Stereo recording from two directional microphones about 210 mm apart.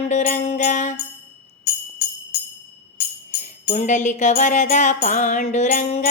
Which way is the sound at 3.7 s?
35° left (ahead or behind).